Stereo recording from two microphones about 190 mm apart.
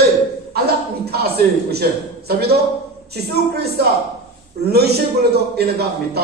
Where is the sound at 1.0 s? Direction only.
55° right (ahead or behind).